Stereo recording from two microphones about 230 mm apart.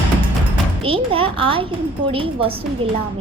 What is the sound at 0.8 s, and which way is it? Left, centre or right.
Speech, right.